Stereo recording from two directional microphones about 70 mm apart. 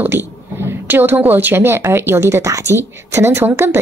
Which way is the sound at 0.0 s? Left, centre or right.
Right.